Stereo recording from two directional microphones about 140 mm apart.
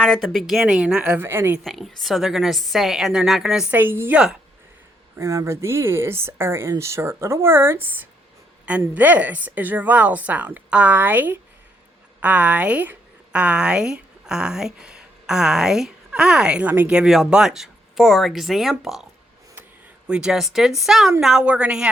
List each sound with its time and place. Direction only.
0.0 s a woman's voice: centre (ahead or behind); by 1.6 s 15° right (ahead or behind)
1.6 s a woman's voice: centre (ahead or behind)
20.1 s a woman's voice: 5° right (ahead or behind)